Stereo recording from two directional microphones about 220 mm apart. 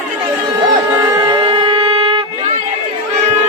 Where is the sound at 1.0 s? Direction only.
20° right (ahead or behind).